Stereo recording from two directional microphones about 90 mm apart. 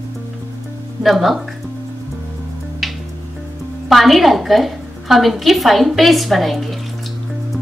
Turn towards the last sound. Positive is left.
turn(degrees=0)  # may be behind; listen again after turning